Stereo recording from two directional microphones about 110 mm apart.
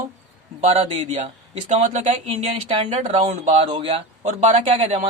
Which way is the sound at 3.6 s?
50° right (ahead or behind).